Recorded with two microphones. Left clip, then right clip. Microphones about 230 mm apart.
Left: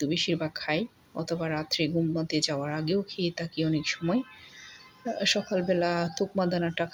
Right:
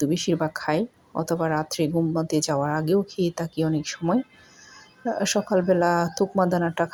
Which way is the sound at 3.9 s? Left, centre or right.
Centre.